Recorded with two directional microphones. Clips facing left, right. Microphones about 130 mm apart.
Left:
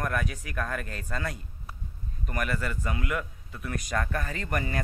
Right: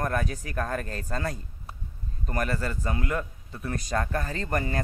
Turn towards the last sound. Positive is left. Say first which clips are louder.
# right 2 dB
turn(degrees=-30)  # may be behind; listen again after turning